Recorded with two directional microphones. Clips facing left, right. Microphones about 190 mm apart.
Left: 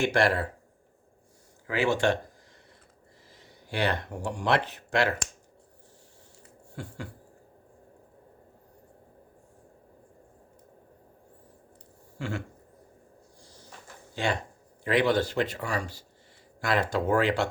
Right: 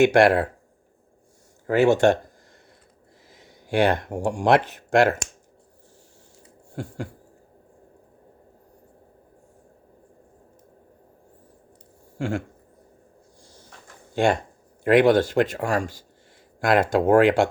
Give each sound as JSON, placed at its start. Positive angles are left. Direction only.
{"t": 0.1, "sound": "speech", "side_deg": -55}
{"t": 1.6, "sound": "speech", "side_deg": -45}
{"t": 3.4, "sound": "speech", "side_deg": -50}
{"t": 6.7, "sound": "speech", "side_deg": -45}
{"t": 12.2, "sound": "speech", "side_deg": -50}
{"t": 14.8, "sound": "speech", "side_deg": -50}